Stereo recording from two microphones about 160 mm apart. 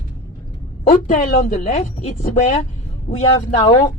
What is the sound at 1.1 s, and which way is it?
A woman's voice, 40° left (ahead or behind).